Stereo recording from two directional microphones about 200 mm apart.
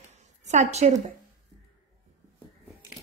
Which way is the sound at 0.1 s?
35° right (ahead or behind).